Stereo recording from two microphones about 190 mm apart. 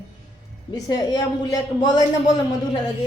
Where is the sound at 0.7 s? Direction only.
20° left (ahead or behind).